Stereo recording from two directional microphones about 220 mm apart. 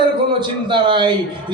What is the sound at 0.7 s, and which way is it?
Speech, 20° right (ahead or behind).